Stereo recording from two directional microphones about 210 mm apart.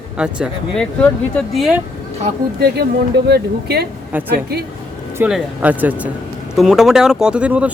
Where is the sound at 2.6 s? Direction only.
50° right (ahead or behind).